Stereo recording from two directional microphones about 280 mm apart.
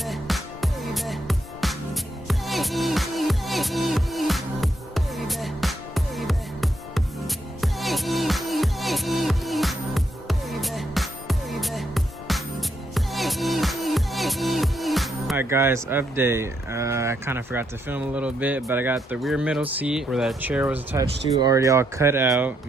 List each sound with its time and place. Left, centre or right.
0.0 s music: centre
19.7 s speech: centre